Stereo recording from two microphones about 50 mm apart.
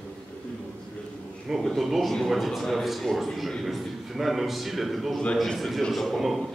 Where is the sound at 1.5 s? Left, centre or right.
Centre.